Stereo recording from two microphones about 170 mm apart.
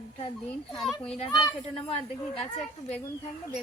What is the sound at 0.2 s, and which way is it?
Speech, 30° left (ahead or behind).